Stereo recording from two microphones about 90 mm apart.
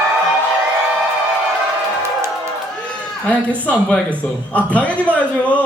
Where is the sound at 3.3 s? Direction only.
15° left (ahead or behind).